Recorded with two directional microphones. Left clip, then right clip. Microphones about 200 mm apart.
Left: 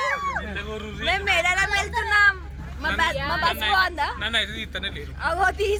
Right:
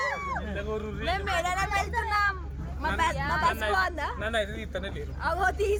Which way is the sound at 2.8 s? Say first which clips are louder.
Left 4 dB; 20° left (ahead or behind).